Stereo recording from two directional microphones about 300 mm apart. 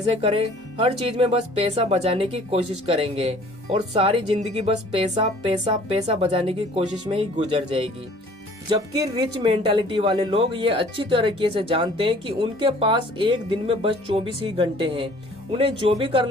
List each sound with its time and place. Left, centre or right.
0.1 s speech: centre